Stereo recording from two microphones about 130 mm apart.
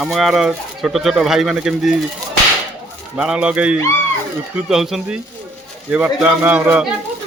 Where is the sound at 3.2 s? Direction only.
5° right (ahead or behind).